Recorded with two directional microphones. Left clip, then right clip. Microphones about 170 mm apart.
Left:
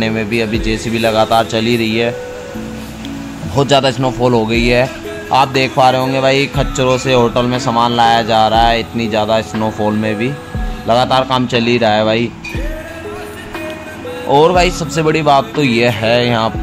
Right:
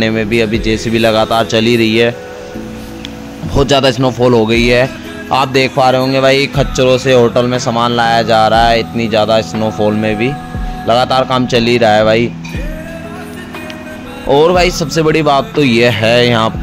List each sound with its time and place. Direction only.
0.0 s a man's voice: 30° right (ahead or behind)
3.5 s a man's voice: 35° right (ahead or behind)
14.3 s a man's voice: 35° right (ahead or behind)